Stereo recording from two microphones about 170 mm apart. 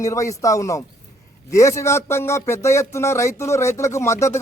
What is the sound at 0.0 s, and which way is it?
Speech, 20° left (ahead or behind).